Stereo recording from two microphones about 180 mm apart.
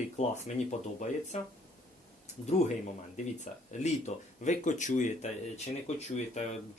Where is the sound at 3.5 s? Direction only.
40° left (ahead or behind).